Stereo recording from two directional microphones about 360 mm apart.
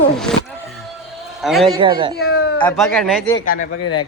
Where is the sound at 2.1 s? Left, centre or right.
Left.